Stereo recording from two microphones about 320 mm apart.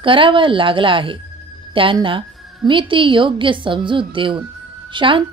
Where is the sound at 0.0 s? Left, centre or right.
Centre.